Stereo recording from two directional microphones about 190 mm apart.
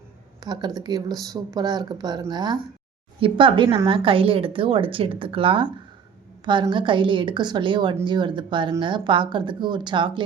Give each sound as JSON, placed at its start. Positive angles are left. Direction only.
{"t": 0.3, "sound": "speech", "side_deg": -25}